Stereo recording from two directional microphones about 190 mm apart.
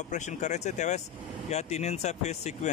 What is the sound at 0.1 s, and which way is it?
Speech, 40° left (ahead or behind).